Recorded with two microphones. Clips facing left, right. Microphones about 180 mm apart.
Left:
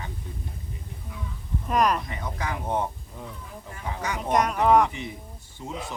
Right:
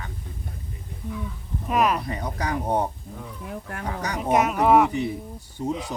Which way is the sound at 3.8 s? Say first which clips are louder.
Right 1 dB; 40° right (ahead or behind).